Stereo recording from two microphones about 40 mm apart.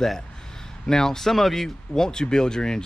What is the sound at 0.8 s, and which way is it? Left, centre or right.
Speech, centre.